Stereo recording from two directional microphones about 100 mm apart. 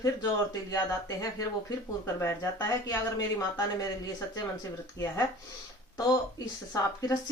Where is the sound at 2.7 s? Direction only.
35° left (ahead or behind).